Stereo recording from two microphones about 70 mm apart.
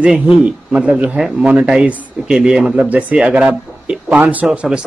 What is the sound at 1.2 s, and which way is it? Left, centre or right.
Speech, centre.